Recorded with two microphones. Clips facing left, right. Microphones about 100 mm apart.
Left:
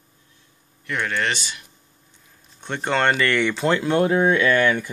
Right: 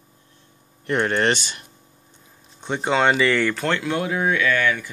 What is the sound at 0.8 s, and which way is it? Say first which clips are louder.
Speech: right 5 dB; 40° right (ahead or behind).